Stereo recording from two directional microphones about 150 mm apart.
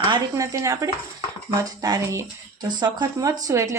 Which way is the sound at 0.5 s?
20° right (ahead or behind).